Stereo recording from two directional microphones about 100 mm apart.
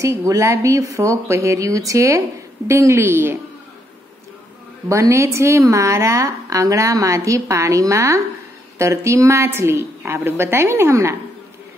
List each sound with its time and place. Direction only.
0.0 s a woman's voice: 30° right (ahead or behind)
4.8 s a woman's voice: 30° right (ahead or behind)